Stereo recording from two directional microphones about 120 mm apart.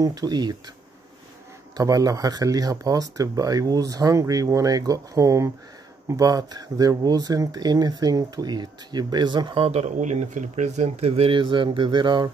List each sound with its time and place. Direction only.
0.0 s speech: 30° right (ahead or behind)
1.8 s speech: 30° right (ahead or behind)
9.7 s speech: 75° right (ahead or behind)
11.3 s speech: 45° right (ahead or behind)